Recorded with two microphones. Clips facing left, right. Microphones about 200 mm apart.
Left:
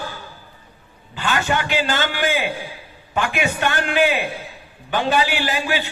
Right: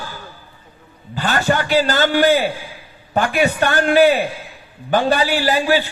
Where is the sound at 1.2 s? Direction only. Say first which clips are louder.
Right 3 dB; 40° right (ahead or behind).